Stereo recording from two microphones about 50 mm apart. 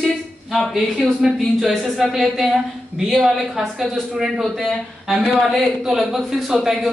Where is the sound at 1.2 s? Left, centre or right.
Centre.